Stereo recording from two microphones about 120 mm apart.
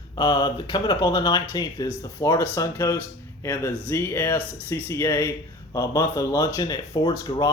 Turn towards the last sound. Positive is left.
turn(degrees=30)  # may be behind; listen again after turning